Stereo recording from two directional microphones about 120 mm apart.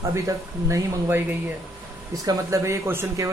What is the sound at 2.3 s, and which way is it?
A man's voice, 25° right (ahead or behind).